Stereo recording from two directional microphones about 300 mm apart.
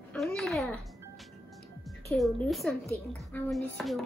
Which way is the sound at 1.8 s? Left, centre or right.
Centre.